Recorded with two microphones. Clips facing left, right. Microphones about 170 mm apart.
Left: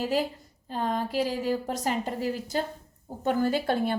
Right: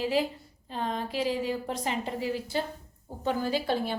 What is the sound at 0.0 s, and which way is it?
A woman's voice, 45° left (ahead or behind).